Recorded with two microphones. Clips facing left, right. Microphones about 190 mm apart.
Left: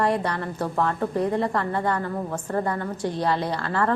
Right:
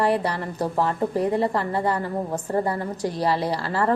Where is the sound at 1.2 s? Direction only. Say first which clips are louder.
Right 1 dB; 10° right (ahead or behind).